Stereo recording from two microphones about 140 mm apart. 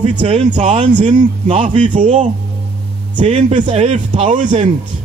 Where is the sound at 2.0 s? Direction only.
55° right (ahead or behind).